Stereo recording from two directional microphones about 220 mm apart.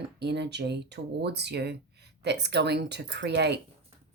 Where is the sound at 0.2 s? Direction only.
50° right (ahead or behind).